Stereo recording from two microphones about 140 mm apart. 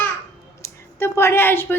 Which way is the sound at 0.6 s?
15° left (ahead or behind).